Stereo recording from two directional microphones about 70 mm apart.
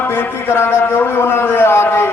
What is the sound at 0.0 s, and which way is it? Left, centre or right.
Speech, left.